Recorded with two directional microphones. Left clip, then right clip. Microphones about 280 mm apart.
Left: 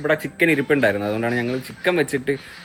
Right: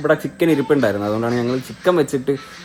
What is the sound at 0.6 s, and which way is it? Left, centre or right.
Speech, centre.